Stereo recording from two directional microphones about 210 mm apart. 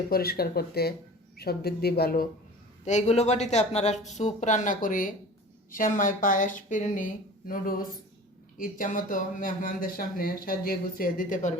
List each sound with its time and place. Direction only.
0.1 s speech: 45° left (ahead or behind)
2.8 s speech: 35° left (ahead or behind)